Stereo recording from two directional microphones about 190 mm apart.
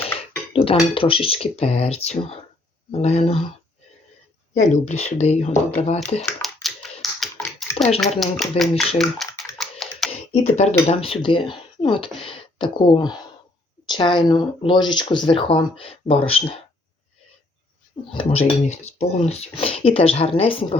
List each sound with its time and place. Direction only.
0.0 s dishes: 30° left (ahead or behind)
0.9 s speech: 30° left (ahead or behind)
4.5 s speech: 40° left (ahead or behind)
6.4 s tap: centre (ahead or behind)
7.6 s bathtub: centre (ahead or behind)
8.2 s speech: centre (ahead or behind)
9.0 s a sound: centre (ahead or behind)
9.6 s typing: centre (ahead or behind)
10.1 s a sound: 35° left (ahead or behind)
10.8 s speech: 30° left (ahead or behind)
18.1 s speech: 30° left (ahead or behind)